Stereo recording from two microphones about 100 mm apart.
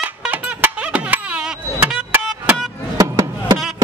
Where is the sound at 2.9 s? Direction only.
30° right (ahead or behind).